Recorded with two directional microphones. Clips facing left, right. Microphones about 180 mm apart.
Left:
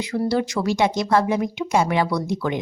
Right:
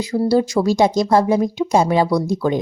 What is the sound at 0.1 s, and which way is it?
Speech, 35° right (ahead or behind).